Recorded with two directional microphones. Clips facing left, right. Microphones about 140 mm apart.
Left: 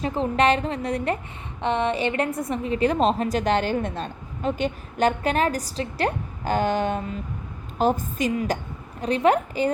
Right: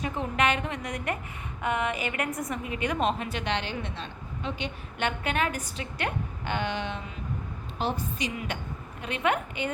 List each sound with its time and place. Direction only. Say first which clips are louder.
0.0 s a woman's voice: left 6 dB; 30° left (ahead or behind)